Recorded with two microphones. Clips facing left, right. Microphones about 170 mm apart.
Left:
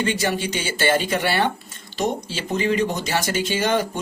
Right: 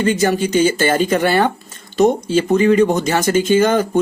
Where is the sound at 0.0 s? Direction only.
40° right (ahead or behind).